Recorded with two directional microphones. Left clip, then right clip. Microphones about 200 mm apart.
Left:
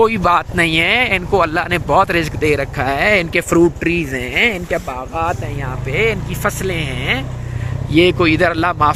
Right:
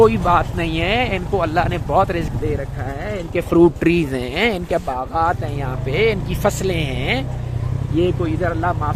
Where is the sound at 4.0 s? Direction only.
10° right (ahead or behind).